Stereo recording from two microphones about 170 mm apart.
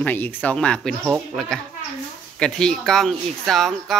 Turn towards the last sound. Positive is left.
turn(degrees=0)  # may be behind; listen again after turning